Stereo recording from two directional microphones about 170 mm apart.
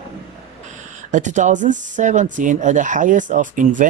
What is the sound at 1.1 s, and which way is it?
Speech, 45° right (ahead or behind).